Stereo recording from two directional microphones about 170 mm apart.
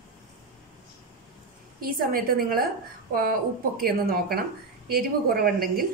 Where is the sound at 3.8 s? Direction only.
60° right (ahead or behind).